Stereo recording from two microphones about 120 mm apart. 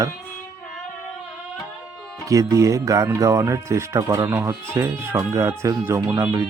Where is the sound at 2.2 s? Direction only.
25° right (ahead or behind).